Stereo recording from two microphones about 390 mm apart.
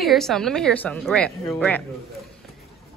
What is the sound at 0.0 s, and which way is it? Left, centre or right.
A woman's voice, centre.